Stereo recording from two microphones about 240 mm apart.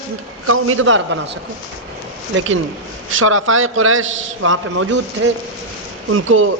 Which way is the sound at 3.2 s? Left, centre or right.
Right.